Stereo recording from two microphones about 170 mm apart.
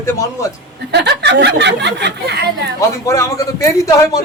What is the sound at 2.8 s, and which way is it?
A man's voice, 20° left (ahead or behind).